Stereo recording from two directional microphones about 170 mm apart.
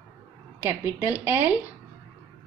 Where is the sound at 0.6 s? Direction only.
10° right (ahead or behind).